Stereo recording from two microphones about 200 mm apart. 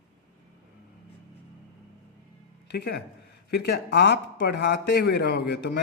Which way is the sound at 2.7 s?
55° left (ahead or behind).